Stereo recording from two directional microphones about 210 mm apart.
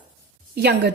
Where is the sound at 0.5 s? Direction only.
50° right (ahead or behind).